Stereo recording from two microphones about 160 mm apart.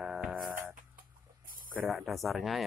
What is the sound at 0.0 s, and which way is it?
Music, centre (ahead or behind).